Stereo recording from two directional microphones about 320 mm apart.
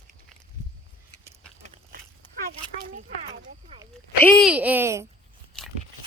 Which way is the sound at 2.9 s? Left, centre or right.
Right.